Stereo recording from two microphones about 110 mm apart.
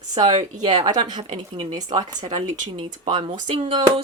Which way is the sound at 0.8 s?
40° right (ahead or behind).